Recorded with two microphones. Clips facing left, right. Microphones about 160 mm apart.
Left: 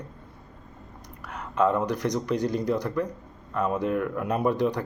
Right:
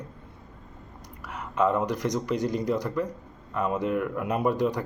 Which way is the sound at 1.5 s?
15° right (ahead or behind).